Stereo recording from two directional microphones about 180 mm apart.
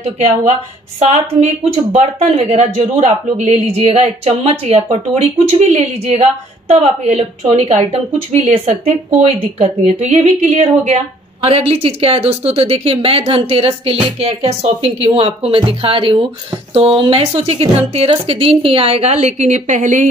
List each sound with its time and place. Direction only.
0.0 s a woman's voice: 40° right (ahead or behind)